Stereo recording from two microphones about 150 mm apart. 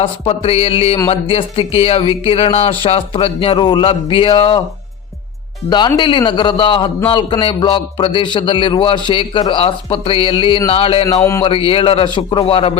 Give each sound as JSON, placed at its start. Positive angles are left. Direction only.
{"t": 0.0, "sound": "speech", "side_deg": 40}
{"t": 5.6, "sound": "speech", "side_deg": 30}
{"t": 11.0, "sound": "speech", "side_deg": 20}
{"t": 11.4, "sound": "speech", "side_deg": 35}